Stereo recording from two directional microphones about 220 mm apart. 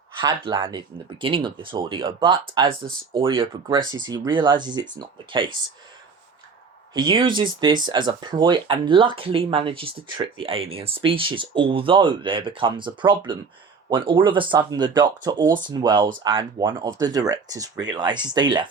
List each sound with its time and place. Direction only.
0.2 s speech: 20° right (ahead or behind)
6.9 s speech: 20° right (ahead or behind)